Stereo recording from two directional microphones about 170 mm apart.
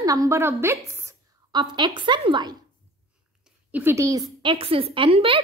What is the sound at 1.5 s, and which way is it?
A woman's voice, 25° right (ahead or behind).